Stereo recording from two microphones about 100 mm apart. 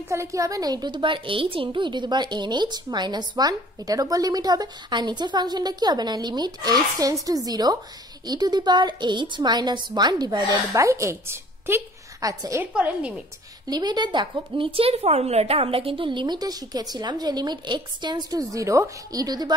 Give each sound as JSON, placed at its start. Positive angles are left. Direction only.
{"t": 0.1, "sound": "a woman's voice", "side_deg": -30}
{"t": 10.7, "sound": "a woman's voice", "side_deg": -30}
{"t": 12.2, "sound": "a woman's voice", "side_deg": -35}
{"t": 12.7, "sound": "a woman's voice", "side_deg": -10}
{"t": 13.7, "sound": "a woman's voice", "side_deg": -45}